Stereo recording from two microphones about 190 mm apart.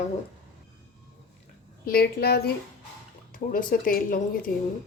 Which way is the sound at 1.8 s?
55° left (ahead or behind).